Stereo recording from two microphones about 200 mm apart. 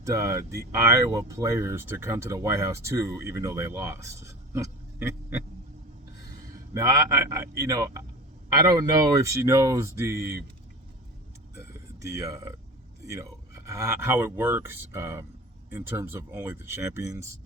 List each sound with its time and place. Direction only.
0.0 s speech: 15° right (ahead or behind)
6.7 s speech: 15° right (ahead or behind)
11.9 s speech: 15° right (ahead or behind)
13.7 s speech: 15° right (ahead or behind)